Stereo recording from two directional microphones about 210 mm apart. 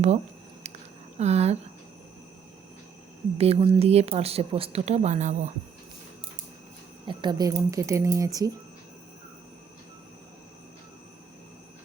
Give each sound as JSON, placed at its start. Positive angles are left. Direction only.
{"t": 1.2, "sound": "speech", "side_deg": -30}
{"t": 3.3, "sound": "a woman's voice", "side_deg": -30}
{"t": 7.1, "sound": "speech", "side_deg": -20}